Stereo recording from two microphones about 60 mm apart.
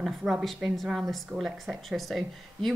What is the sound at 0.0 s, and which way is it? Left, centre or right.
Speech, centre.